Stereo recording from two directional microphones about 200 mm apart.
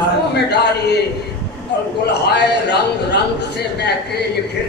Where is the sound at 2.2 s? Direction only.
55° left (ahead or behind).